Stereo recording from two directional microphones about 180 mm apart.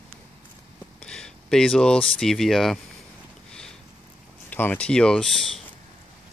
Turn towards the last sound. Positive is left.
turn(degrees=5)  # may be behind; listen again after turning